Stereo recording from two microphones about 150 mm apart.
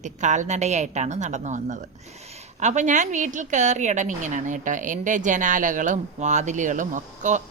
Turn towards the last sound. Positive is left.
turn(degrees=-55)  # may be behind; listen again after turning